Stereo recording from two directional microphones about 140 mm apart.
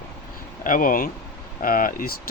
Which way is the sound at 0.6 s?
75° left (ahead or behind).